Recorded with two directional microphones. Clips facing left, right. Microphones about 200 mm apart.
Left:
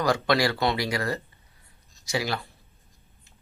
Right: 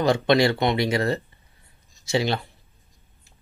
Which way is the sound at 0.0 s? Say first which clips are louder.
Right 4 dB; 25° right (ahead or behind).